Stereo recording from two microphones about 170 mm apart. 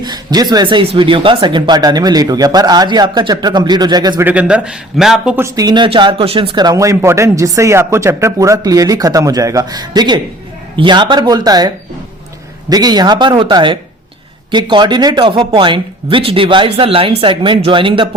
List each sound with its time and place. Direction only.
0.0 s speech: 25° right (ahead or behind)
4.3 s a man's voice: 5° right (ahead or behind)
5.4 s speech: 20° right (ahead or behind)